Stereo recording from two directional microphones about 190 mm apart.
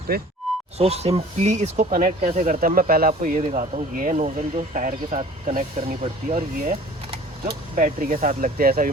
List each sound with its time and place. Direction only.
0.1 s speech: 55° right (ahead or behind)
0.8 s speech: 35° right (ahead or behind); by 8.9 s 50° right (ahead or behind)